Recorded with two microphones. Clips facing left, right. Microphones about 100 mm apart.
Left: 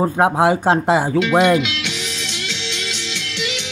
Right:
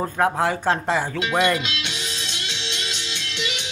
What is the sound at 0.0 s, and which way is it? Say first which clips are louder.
Speech: left 6 dB; 25° left (ahead or behind).